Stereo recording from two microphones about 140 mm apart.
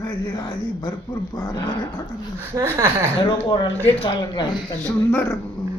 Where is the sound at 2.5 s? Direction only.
20° right (ahead or behind).